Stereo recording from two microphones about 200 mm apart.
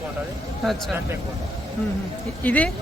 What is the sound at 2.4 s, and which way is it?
Speech, 5° left (ahead or behind).